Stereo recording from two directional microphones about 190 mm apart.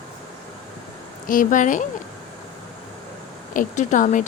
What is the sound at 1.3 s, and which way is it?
Speech, 45° left (ahead or behind).